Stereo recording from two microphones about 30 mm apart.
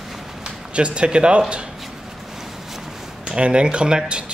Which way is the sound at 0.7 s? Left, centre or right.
Right.